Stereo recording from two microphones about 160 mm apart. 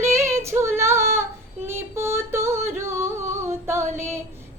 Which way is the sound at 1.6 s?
15° right (ahead or behind).